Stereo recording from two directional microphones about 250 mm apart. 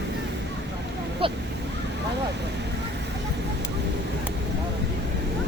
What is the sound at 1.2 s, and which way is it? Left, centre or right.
Speech, right.